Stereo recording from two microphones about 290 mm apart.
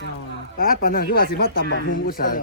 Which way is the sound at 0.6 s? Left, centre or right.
Left.